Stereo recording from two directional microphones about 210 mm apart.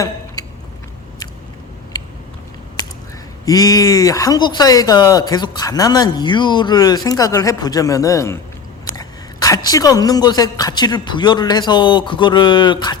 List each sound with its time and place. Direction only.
3.4 s speech: 15° left (ahead or behind)
8.8 s a sound: 15° left (ahead or behind)
9.6 s speech: 15° left (ahead or behind)